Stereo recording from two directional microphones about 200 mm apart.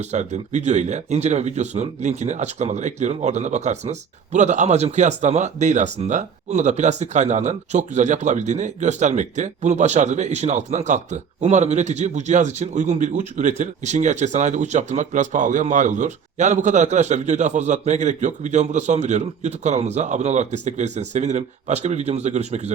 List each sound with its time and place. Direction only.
0.0 s speech: 35° right (ahead or behind)